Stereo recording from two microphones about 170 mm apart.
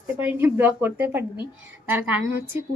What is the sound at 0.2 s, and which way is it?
Speech, 10° right (ahead or behind).